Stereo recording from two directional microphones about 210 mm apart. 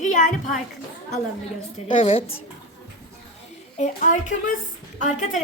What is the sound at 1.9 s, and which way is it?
Speech, 25° left (ahead or behind).